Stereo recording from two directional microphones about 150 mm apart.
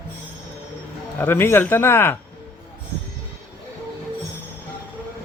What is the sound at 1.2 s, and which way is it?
Speech, 15° left (ahead or behind).